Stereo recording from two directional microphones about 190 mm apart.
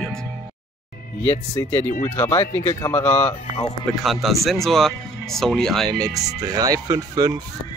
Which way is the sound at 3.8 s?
Centre (ahead or behind).